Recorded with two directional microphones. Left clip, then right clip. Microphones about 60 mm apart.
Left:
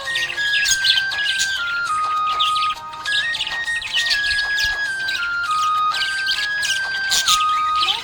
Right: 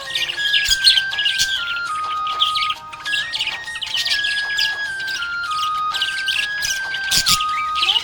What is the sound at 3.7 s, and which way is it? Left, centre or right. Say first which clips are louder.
Music: left 3 dB; left.